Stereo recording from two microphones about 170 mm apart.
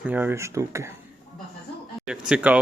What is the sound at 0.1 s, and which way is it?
Speech, 10° right (ahead or behind).